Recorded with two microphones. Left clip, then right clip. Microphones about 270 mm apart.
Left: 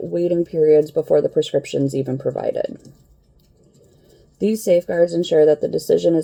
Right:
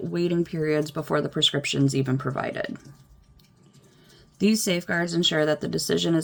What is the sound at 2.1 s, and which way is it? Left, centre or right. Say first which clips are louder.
Speech: left 7 dB; right.